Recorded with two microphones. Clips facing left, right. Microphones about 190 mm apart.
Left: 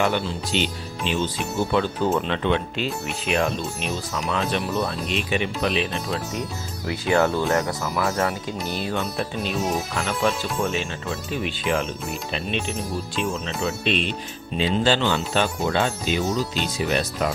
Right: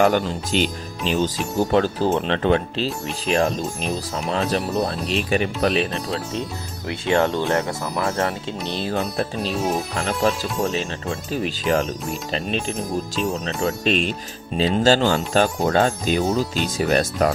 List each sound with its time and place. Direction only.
0.0 s speech: 45° right (ahead or behind)
6.8 s speech: 25° right (ahead or behind); by 17.3 s 45° right (ahead or behind)